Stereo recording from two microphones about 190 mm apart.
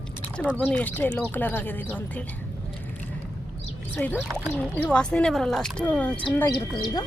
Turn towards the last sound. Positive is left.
turn(degrees=25)  # may be behind; listen again after turning